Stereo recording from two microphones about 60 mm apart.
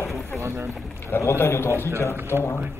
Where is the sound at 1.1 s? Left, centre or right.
Left.